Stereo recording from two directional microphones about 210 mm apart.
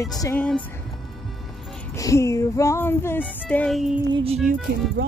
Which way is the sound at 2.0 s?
15° left (ahead or behind).